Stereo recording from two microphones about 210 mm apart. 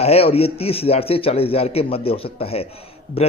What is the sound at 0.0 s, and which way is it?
A man's voice, 30° left (ahead or behind).